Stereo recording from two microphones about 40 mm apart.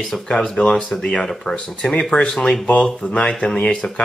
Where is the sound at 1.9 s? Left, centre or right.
Centre.